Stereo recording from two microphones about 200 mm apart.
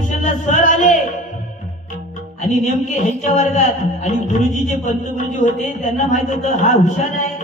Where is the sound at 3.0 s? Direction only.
35° left (ahead or behind).